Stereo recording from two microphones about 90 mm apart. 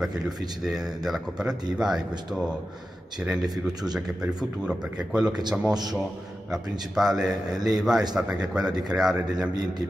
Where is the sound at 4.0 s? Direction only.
5° right (ahead or behind).